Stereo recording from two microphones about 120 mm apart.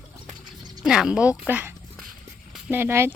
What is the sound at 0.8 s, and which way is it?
Speech, 5° right (ahead or behind).